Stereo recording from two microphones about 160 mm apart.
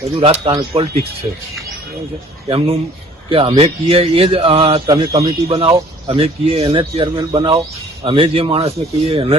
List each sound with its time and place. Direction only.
0.2 s a man's voice: 35° right (ahead or behind)
2.5 s a man's voice: 35° right (ahead or behind)